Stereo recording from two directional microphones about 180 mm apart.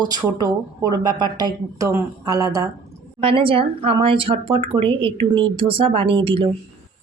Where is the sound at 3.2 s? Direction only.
30° right (ahead or behind).